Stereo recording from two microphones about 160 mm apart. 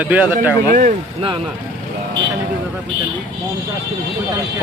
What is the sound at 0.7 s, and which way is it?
Speech, 55° right (ahead or behind).